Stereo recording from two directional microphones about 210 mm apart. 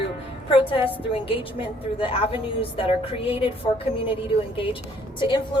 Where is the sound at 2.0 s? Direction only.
25° left (ahead or behind).